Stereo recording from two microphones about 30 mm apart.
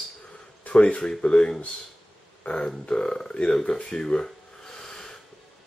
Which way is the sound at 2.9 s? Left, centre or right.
Left.